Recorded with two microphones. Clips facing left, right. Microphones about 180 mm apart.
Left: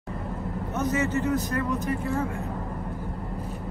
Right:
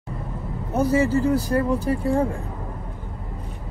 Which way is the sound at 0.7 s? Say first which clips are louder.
Right 7 dB; 30° right (ahead or behind).